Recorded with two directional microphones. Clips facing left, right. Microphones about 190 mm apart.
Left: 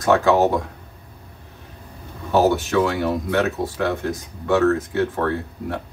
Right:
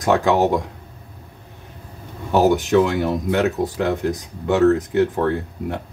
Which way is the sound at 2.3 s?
15° right (ahead or behind).